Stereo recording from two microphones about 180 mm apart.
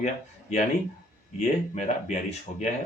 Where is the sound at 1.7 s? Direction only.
40° left (ahead or behind).